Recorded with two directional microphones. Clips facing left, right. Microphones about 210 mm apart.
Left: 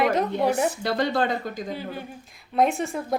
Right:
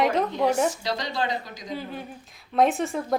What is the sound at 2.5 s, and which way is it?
Speech, centre (ahead or behind).